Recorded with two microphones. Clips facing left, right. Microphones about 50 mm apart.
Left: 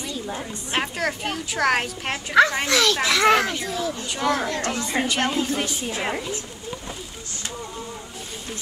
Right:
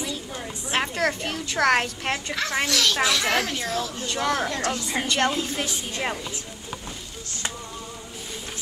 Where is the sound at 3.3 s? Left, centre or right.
Left.